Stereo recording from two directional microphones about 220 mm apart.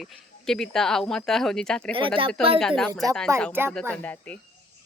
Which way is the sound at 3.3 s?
15° right (ahead or behind).